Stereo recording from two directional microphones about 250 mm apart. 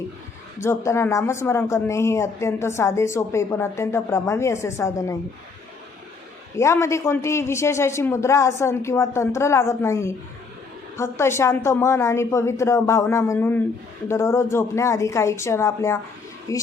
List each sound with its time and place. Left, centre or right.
0.6 s speech: centre
6.6 s speech: centre